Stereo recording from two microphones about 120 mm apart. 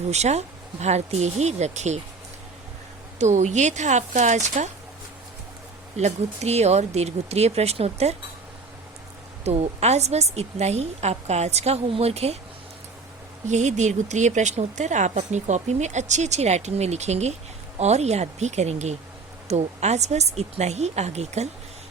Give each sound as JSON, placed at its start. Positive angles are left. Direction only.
{"t": 0.1, "sound": "speech", "side_deg": -65}
{"t": 3.2, "sound": "speech", "side_deg": -75}
{"t": 6.0, "sound": "a woman's voice", "side_deg": -65}
{"t": 9.4, "sound": "a woman's voice", "side_deg": -60}
{"t": 13.5, "sound": "speech", "side_deg": -80}